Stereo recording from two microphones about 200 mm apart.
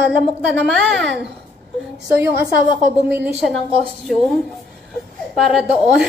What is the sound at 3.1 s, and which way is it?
Speech, 5° right (ahead or behind).